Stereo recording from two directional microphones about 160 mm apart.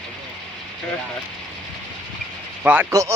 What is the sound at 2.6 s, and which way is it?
Speech, 10° right (ahead or behind).